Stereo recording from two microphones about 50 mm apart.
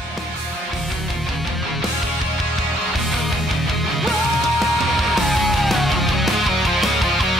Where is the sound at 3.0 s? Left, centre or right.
Centre.